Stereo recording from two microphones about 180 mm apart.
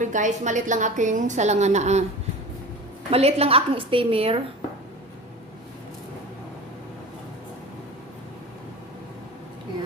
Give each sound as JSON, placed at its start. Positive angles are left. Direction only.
{"t": 0.0, "sound": "a woman's voice", "side_deg": -45}
{"t": 3.1, "sound": "a woman's voice", "side_deg": -35}